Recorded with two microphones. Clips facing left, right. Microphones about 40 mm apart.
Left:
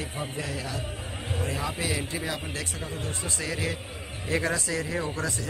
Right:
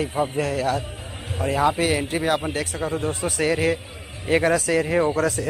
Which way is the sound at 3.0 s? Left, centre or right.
Right.